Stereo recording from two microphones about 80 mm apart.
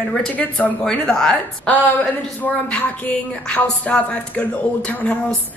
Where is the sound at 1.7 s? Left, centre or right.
Centre.